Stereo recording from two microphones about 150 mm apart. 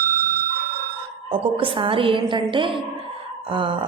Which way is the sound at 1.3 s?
35° right (ahead or behind).